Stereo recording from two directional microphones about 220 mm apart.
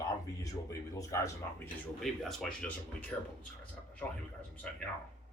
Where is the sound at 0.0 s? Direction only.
15° left (ahead or behind).